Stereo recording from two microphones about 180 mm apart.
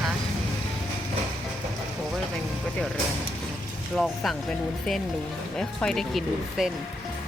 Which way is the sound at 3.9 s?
Centre (ahead or behind).